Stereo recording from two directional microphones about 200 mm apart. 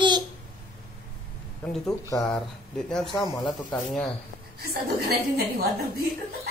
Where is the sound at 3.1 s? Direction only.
15° left (ahead or behind).